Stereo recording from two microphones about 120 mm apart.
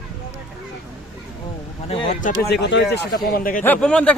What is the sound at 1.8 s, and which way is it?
Speech, 65° left (ahead or behind).